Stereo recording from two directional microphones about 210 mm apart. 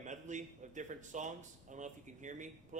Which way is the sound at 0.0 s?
35° right (ahead or behind).